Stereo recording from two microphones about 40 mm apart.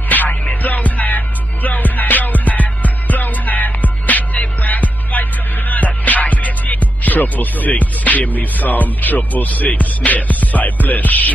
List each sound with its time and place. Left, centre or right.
0.1 s music: left